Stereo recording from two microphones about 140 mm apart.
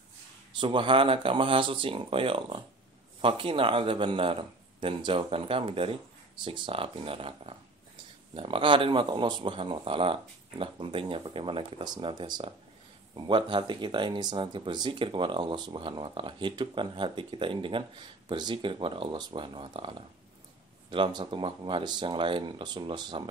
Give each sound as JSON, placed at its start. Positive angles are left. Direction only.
{"t": 0.6, "sound": "speech", "side_deg": -35}